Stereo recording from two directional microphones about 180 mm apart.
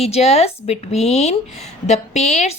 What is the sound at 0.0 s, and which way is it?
Speech, 35° left (ahead or behind).